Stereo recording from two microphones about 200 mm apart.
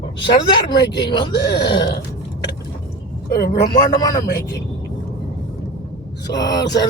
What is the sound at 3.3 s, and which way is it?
Speech, 50° left (ahead or behind).